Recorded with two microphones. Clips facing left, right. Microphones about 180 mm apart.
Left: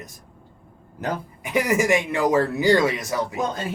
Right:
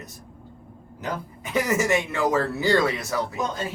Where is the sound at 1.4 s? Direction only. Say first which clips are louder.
Left 3 dB; 15° left (ahead or behind).